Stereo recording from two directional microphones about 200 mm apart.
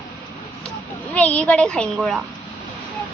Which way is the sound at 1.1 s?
5° left (ahead or behind).